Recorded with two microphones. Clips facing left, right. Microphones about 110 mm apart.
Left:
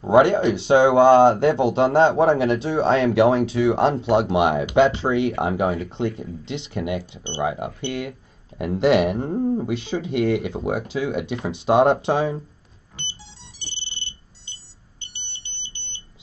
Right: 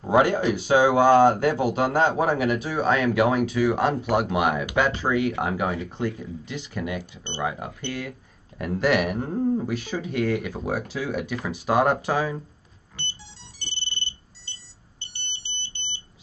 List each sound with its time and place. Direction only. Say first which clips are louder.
0.0 s speech: left 4 dB; 25° left (ahead or behind)
13.6 s music: right 4 dB; 15° left (ahead or behind)